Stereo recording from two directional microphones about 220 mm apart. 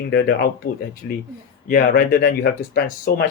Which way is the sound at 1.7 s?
40° left (ahead or behind).